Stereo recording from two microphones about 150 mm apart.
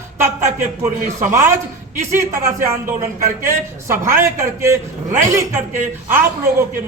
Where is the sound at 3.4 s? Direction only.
20° right (ahead or behind).